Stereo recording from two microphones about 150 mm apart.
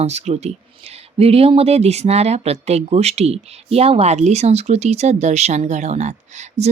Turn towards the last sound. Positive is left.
turn(degrees=-50)  # may be behind; listen again after turning